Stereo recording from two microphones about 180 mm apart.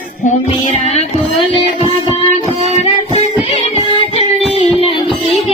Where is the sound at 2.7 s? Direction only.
35° left (ahead or behind).